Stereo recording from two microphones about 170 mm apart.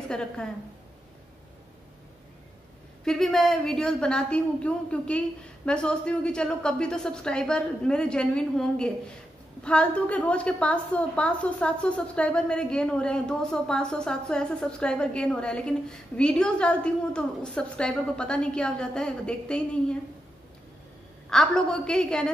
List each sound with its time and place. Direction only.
0.1 s a woman's voice: 5° left (ahead or behind)
3.1 s a woman's voice: centre (ahead or behind)
21.3 s a woman's voice: 5° left (ahead or behind)